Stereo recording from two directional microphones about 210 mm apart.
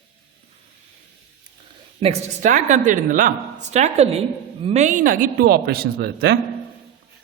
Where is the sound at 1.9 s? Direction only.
35° right (ahead or behind); by 6.4 s 50° right (ahead or behind).